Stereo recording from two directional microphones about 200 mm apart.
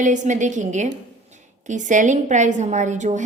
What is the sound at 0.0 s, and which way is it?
A woman's voice, 40° right (ahead or behind).